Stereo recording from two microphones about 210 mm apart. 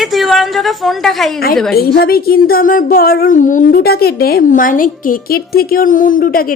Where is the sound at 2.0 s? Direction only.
45° left (ahead or behind).